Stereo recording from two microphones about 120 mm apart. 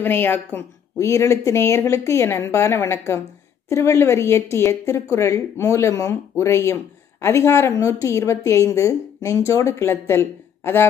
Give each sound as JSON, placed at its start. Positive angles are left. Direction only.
{"t": 0.0, "sound": "speech", "side_deg": 15}